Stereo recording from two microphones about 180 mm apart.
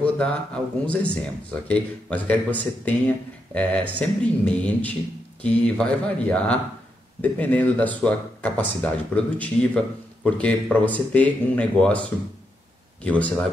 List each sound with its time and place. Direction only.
0.0 s a sound: 5° left (ahead or behind)
0.8 s speech: 5° left (ahead or behind)
13.0 s speech: 5° left (ahead or behind)